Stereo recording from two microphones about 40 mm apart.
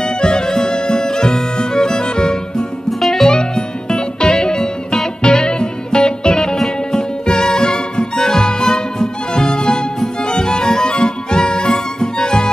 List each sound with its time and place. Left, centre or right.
0.0 s music: centre
3.0 s music: centre
3.3 s music: centre
6.5 s music: centre
7.0 s music: centre